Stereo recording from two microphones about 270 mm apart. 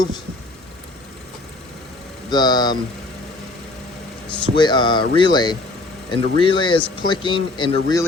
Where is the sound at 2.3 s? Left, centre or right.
Centre.